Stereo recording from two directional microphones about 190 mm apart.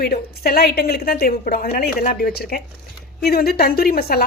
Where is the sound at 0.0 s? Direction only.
55° left (ahead or behind).